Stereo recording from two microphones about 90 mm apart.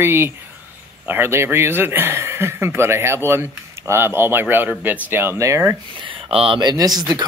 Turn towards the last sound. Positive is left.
turn(degrees=-45)  # may be behind; listen again after turning